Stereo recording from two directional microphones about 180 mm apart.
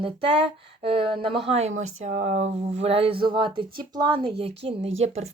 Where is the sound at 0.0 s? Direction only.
30° right (ahead or behind).